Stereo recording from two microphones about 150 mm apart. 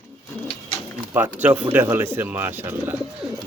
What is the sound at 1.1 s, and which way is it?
A man's voice, 10° right (ahead or behind).